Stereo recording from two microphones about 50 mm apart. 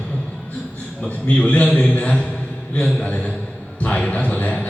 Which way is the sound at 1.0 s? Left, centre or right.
Left.